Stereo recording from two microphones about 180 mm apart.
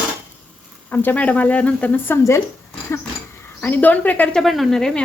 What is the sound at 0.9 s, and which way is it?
Speech, 10° left (ahead or behind).